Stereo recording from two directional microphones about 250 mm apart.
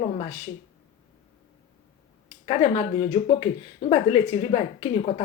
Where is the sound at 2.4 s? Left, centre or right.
Left.